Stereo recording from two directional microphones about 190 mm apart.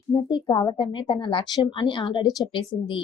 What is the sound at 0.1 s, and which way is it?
A woman's voice, 25° left (ahead or behind).